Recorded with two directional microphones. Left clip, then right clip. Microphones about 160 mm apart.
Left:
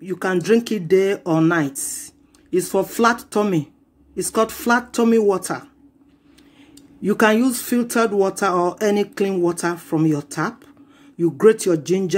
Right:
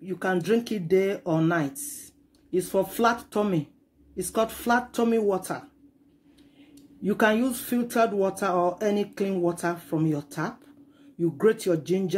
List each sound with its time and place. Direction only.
0.0 s speech: 30° left (ahead or behind)
7.0 s speech: 30° left (ahead or behind)